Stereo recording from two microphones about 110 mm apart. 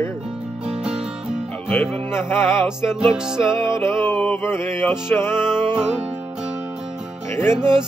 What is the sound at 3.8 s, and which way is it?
Mantra, 25° left (ahead or behind).